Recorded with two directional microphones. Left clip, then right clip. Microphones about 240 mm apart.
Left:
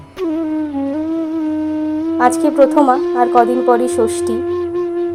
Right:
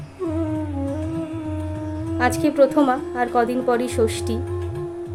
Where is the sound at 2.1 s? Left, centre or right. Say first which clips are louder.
Left 6 dB; centre.